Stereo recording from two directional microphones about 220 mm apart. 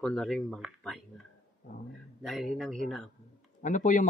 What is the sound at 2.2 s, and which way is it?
Speech, centre (ahead or behind).